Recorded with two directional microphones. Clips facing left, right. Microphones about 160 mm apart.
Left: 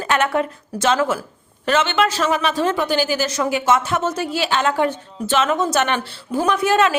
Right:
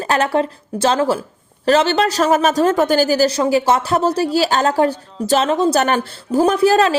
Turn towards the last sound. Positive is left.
turn(degrees=-35)  # may be behind; listen again after turning